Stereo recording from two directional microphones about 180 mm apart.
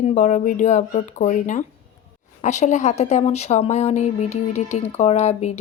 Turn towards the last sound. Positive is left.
turn(degrees=35)  # may be behind; listen again after turning